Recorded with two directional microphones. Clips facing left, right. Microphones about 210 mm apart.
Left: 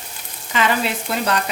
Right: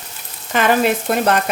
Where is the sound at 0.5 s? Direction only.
50° right (ahead or behind).